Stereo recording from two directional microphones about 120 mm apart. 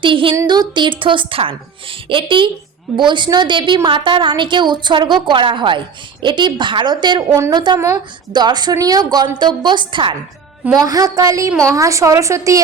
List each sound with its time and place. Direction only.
0.0 s a woman's voice: 45° right (ahead or behind)
10.8 s a woman's voice: 30° right (ahead or behind)